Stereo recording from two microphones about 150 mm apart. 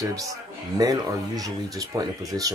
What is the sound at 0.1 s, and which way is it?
Speech, 20° right (ahead or behind).